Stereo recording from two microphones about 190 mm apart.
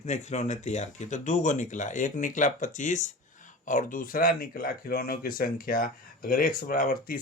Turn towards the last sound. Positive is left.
turn(degrees=50)  # may be behind; listen again after turning